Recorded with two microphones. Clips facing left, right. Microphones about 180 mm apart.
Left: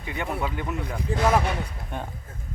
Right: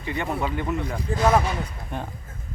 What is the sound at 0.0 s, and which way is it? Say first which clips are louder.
Speech: right 3 dB; 5° left (ahead or behind).